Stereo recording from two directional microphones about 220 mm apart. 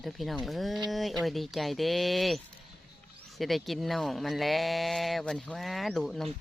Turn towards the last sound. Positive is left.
turn(degrees=0)  # may be behind; listen again after turning